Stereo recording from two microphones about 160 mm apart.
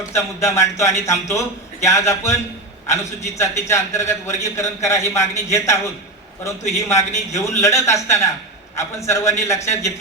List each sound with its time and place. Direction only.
0.1 s a man's voice: 15° left (ahead or behind)